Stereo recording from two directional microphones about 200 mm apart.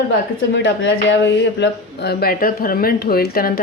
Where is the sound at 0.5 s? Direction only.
65° left (ahead or behind).